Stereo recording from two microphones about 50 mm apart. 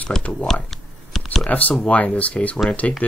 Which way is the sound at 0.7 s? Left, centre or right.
Centre.